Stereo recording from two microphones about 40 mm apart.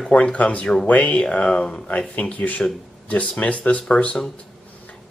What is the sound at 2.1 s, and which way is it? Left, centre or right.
Speech, left.